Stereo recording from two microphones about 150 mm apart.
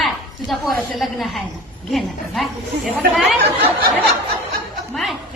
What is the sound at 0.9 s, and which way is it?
A woman's voice, centre (ahead or behind).